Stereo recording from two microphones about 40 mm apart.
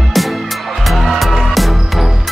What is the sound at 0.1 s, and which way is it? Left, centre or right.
Music, centre.